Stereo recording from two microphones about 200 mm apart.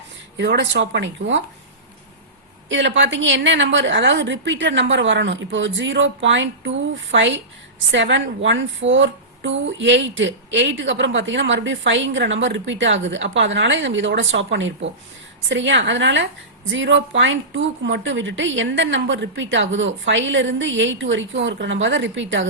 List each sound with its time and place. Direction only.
0.3 s a woman's voice: 60° right (ahead or behind)
2.6 s a woman's voice: 65° right (ahead or behind)